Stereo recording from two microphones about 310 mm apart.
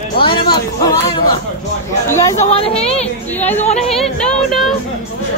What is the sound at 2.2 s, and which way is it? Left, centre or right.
Speech, centre.